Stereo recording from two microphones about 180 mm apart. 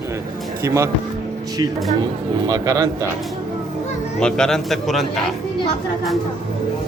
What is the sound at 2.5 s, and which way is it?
Speech, 20° right (ahead or behind).